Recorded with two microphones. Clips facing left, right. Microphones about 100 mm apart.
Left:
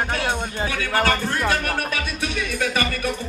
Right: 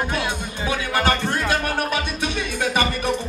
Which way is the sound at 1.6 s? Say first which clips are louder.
Right 2 dB; 25° right (ahead or behind).